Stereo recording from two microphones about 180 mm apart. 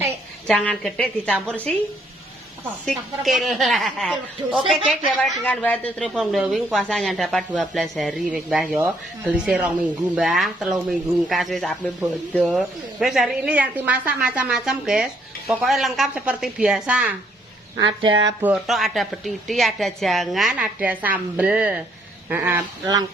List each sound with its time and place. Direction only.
0.4 s a woman's voice: 5° left (ahead or behind)
18.0 s speech: 25° right (ahead or behind)
18.4 s a woman's voice: centre (ahead or behind)